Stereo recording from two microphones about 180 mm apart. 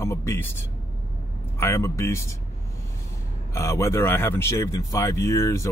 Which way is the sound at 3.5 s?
15° left (ahead or behind).